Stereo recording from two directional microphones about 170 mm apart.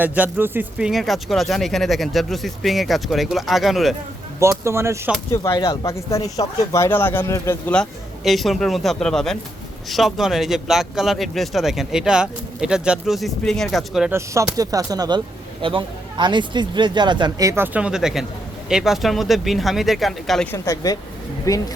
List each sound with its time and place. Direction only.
0.0 s speech: 10° right (ahead or behind)
4.4 s speech: 15° right (ahead or behind)
5.3 s speech: 15° left (ahead or behind); by 14.1 s centre (ahead or behind)
14.1 s speech: 15° right (ahead or behind); by 20.5 s centre (ahead or behind)
20.5 s speech: 20° left (ahead or behind)